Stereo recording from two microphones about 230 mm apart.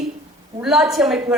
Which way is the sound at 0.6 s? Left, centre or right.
Centre.